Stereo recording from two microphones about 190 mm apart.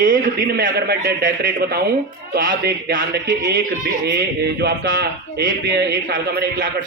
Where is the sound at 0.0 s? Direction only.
50° right (ahead or behind).